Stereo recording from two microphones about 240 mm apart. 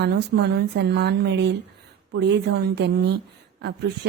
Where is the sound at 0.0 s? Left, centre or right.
Right.